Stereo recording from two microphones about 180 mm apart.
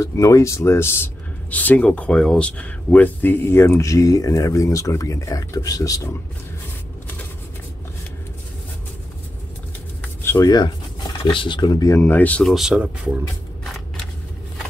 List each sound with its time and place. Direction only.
0.0 s speech: 20° left (ahead or behind)
10.2 s speech: 15° left (ahead or behind)
12.0 s speech: 10° left (ahead or behind); by 13.1 s 5° right (ahead or behind)